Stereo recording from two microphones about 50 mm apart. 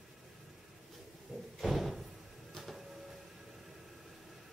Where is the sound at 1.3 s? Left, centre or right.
Centre.